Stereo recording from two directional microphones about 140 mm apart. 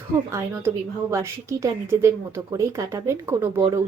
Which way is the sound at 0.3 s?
20° right (ahead or behind).